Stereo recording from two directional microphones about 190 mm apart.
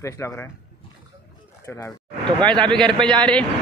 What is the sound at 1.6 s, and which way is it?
A man's voice, 15° left (ahead or behind).